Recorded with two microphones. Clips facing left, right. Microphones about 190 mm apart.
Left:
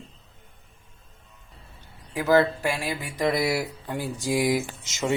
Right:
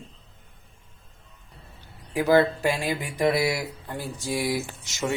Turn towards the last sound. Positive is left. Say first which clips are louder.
# left 3 dB
turn(degrees=20)  # may be behind; listen again after turning